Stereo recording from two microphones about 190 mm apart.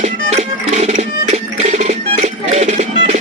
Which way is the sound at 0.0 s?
35° right (ahead or behind).